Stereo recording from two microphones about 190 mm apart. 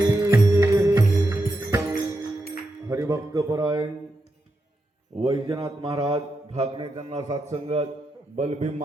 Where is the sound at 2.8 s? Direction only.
15° right (ahead or behind).